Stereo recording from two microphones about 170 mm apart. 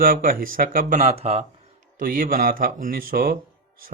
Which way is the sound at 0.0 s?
55° right (ahead or behind).